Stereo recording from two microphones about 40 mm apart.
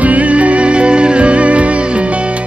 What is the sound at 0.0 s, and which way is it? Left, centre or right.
Music, right.